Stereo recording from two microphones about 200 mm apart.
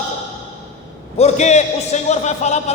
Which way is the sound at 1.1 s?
35° left (ahead or behind).